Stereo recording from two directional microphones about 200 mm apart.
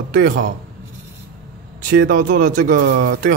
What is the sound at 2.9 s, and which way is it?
Speech, 60° right (ahead or behind).